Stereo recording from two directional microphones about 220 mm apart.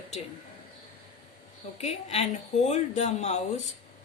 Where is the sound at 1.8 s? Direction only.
30° left (ahead or behind).